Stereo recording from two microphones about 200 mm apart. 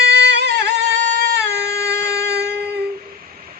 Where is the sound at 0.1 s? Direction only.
60° right (ahead or behind).